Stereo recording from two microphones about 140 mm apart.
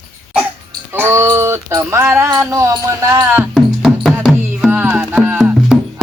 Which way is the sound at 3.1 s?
15° right (ahead or behind).